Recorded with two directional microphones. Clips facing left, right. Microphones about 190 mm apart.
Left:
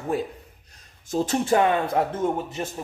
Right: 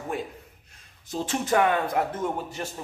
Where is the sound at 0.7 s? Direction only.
45° left (ahead or behind).